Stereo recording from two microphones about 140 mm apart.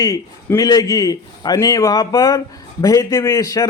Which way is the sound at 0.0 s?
25° left (ahead or behind).